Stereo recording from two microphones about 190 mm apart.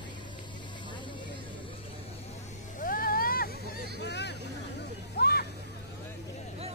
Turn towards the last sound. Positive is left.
turn(degrees=55)  # may be behind; listen again after turning